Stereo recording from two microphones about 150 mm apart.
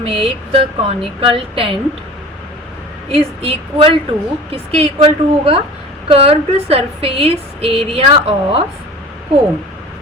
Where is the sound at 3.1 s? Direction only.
40° right (ahead or behind).